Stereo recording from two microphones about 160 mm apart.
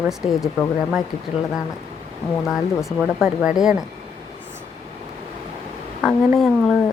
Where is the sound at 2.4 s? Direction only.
Centre (ahead or behind).